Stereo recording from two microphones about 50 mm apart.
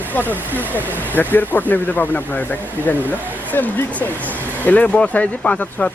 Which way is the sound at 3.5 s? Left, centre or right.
Left.